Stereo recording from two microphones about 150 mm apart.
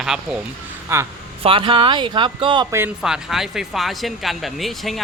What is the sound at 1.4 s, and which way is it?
Speech, 35° right (ahead or behind).